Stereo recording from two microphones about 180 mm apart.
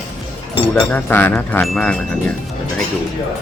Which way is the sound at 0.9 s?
10° left (ahead or behind).